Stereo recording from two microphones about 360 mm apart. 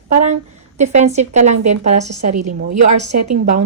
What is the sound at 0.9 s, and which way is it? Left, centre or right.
Speech, centre.